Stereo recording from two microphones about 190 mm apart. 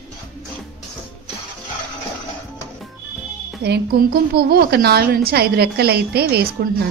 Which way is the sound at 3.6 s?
55° right (ahead or behind).